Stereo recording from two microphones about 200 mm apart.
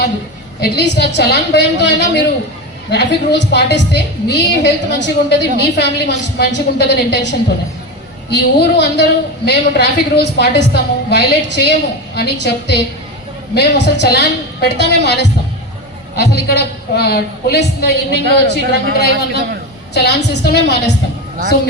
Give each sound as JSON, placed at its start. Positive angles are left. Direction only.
{"t": 0.6, "sound": "a woman's voice", "side_deg": 60}